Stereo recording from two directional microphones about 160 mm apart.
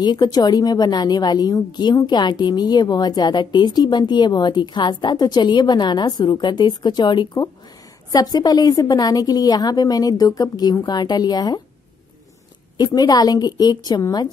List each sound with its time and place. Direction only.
0.0 s a woman's voice: 25° left (ahead or behind)
12.7 s a woman's voice: 25° left (ahead or behind)